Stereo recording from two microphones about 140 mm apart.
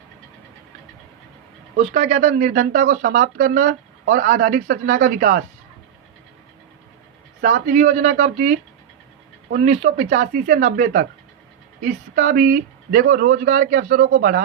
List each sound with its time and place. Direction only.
1.8 s speech: 55° right (ahead or behind)
2.3 s speech: 85° right
7.4 s speech: 65° right (ahead or behind); by 14.4 s 90° right